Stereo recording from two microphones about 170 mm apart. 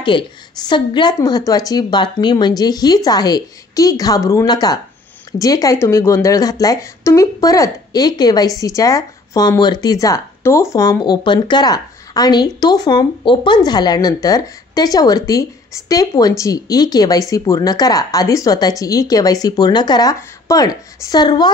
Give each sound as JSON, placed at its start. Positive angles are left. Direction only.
{"t": 0.0, "sound": "speech", "side_deg": 25}